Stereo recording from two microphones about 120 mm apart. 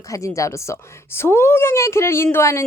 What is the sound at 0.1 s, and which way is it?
A woman's voice, 25° left (ahead or behind).